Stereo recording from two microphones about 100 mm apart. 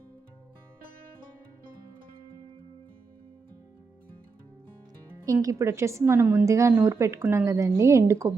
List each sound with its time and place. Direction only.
5.2 s a woman's voice: 35° right (ahead or behind)